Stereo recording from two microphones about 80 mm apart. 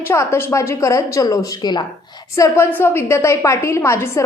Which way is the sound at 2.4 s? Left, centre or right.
Left.